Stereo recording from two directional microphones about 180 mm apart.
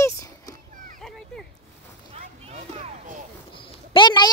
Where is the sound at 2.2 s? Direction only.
35° right (ahead or behind).